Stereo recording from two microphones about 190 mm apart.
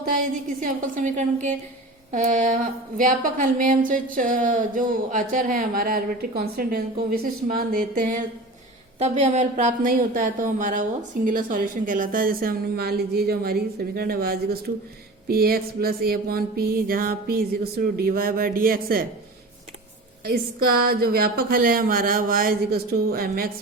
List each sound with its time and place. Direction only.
0.0 s speech: 45° right (ahead or behind)
9.0 s speech: 35° right (ahead or behind)
20.2 s speech: 55° right (ahead or behind)